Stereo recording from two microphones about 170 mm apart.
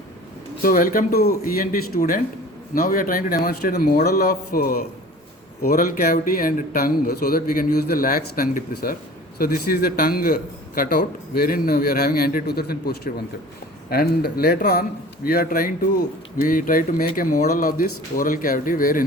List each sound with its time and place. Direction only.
0.6 s a man's voice: 55° left (ahead or behind)